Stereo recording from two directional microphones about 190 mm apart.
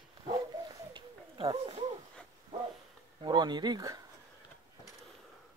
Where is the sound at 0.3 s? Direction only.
20° right (ahead or behind).